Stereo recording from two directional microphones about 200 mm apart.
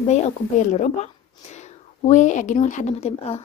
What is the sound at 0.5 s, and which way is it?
A woman's voice, 35° left (ahead or behind).